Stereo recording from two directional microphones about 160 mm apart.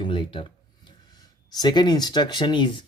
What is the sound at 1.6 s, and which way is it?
Speech, 25° left (ahead or behind).